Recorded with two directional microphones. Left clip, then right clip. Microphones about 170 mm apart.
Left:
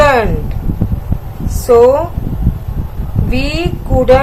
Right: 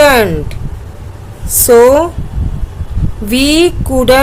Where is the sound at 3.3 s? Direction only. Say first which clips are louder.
Right 9 dB; 55° right (ahead or behind).